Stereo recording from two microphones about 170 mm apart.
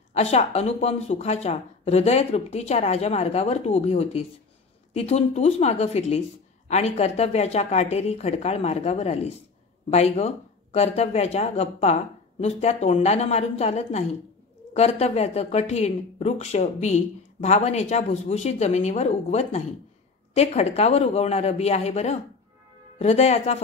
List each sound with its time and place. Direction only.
0.1 s a woman's voice: 40° left (ahead or behind)